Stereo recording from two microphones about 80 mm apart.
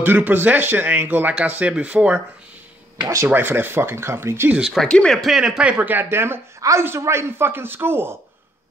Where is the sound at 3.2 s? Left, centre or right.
Right.